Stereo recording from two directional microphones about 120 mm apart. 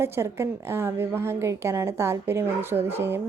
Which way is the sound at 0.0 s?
20° right (ahead or behind).